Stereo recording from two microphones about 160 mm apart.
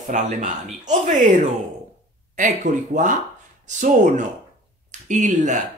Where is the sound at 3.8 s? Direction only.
50° right (ahead or behind).